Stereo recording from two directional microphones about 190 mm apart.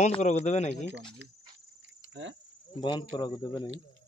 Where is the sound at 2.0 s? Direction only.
75° right (ahead or behind).